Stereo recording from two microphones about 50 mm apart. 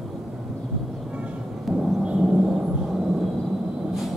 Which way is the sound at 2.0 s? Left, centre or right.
Centre.